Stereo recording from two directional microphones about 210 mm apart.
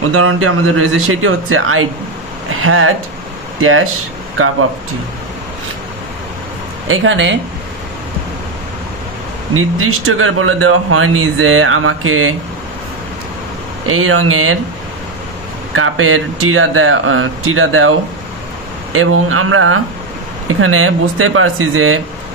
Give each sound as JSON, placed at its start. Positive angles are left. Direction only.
{"t": 0.1, "sound": "speech", "side_deg": -90}
{"t": 6.9, "sound": "speech", "side_deg": -65}
{"t": 9.5, "sound": "speech", "side_deg": -85}
{"t": 13.8, "sound": "speech", "side_deg": -85}
{"t": 15.7, "sound": "speech", "side_deg": -80}
{"t": 18.9, "sound": "speech", "side_deg": -85}